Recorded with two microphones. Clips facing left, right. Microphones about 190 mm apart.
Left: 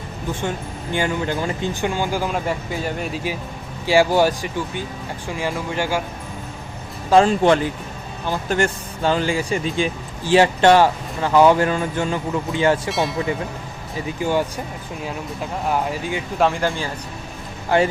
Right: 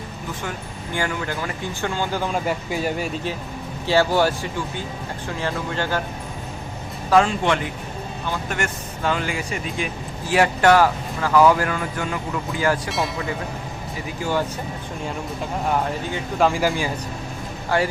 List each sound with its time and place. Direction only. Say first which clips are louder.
0.9 s speech: left 4 dB; 20° left (ahead or behind)
5.4 s speech: left 2 dB; 15° left (ahead or behind)
7.1 s speech: left 4 dB; 35° left (ahead or behind)
12.9 s speech: left 3 dB; centre (ahead or behind)
14.2 s speech: left 3 dB; 15° left (ahead or behind)
15.6 s speech: left 1 dB; 5° left (ahead or behind)
17.7 s speech: left 4 dB; 20° left (ahead or behind)